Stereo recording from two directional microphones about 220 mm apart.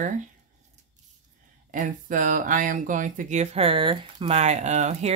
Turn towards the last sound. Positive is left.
turn(degrees=-30)  # may be behind; listen again after turning